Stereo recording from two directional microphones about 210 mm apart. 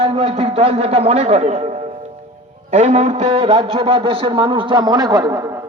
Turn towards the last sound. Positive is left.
turn(degrees=-15)  # may be behind; listen again after turning